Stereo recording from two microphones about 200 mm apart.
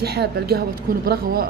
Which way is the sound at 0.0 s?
55° right (ahead or behind).